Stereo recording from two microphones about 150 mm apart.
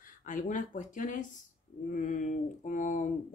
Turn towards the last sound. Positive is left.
turn(degrees=60)  # may be behind; listen again after turning